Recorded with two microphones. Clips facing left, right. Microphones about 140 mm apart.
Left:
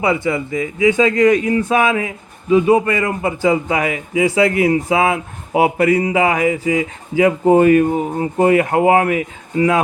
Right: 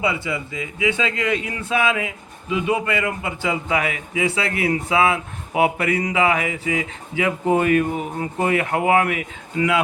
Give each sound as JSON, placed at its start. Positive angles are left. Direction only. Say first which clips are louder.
{"t": 0.0, "sound": "a man's voice", "louder": "left 6 dB", "side_deg": 50}